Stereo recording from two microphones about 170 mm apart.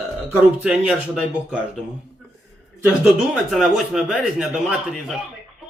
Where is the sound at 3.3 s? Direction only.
5° right (ahead or behind).